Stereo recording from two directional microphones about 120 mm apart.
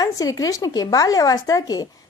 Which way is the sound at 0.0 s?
30° left (ahead or behind).